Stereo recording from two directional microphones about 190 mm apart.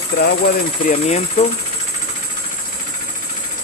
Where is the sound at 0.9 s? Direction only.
35° left (ahead or behind).